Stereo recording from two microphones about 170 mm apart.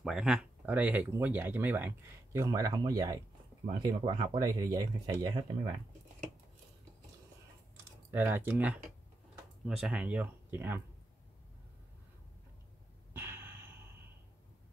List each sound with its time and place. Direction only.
0.0 s speech: 5° right (ahead or behind); by 5.4 s 25° right (ahead or behind)
8.1 s speech: 10° right (ahead or behind)
13.1 s a sound: 15° right (ahead or behind)